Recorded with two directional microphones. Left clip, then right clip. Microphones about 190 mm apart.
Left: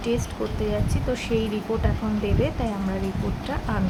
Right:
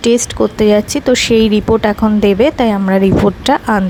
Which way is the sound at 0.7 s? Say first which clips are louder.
Right 16 dB; 50° right (ahead or behind).